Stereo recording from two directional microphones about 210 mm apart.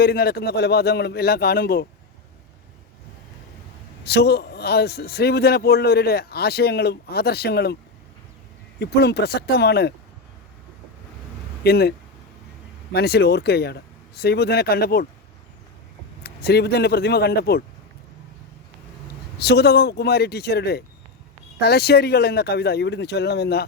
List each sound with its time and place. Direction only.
0.0 s a man's voice: 50° left (ahead or behind)
4.0 s a man's voice: 50° left (ahead or behind)
8.8 s a man's voice: 50° left (ahead or behind)
11.6 s a man's voice: 50° left (ahead or behind)
16.2 s a man's voice: 50° left (ahead or behind)
19.4 s a man's voice: 50° left (ahead or behind)